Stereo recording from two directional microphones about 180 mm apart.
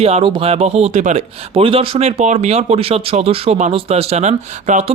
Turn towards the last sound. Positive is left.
turn(degrees=-40)  # may be behind; listen again after turning